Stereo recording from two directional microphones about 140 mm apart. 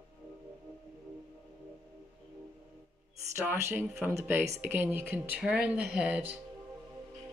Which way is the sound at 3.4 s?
15° right (ahead or behind).